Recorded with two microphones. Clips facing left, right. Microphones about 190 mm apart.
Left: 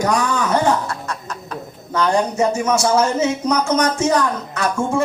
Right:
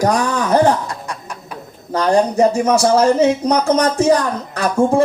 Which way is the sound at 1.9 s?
35° right (ahead or behind).